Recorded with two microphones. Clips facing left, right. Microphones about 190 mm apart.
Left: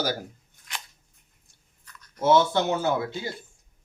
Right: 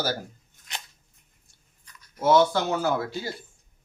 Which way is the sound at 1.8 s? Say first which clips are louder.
Left 1 dB; 10° right (ahead or behind).